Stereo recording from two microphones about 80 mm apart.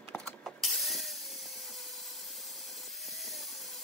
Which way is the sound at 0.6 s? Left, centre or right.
Centre.